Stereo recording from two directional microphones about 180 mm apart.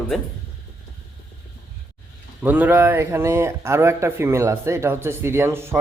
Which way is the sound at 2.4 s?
10° right (ahead or behind).